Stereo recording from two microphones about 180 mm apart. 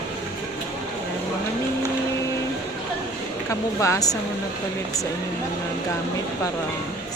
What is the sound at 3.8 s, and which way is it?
Speech, 20° left (ahead or behind).